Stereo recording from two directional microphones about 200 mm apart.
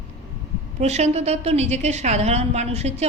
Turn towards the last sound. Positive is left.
turn(degrees=-35)  # may be behind; listen again after turning